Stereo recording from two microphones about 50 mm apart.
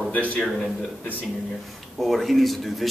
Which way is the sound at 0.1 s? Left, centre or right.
Left.